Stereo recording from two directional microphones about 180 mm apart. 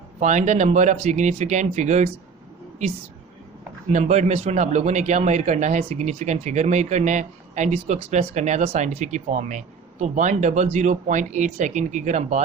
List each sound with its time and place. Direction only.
0.2 s speech: 40° right (ahead or behind)
3.9 s speech: 40° right (ahead or behind)